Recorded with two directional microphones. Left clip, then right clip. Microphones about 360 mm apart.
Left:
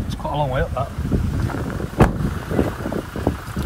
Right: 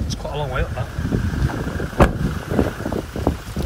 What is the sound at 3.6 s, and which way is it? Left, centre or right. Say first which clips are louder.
Boat: right 1 dB; centre.